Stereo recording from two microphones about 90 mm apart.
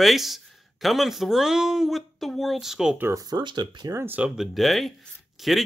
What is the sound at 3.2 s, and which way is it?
Speech, 50° right (ahead or behind).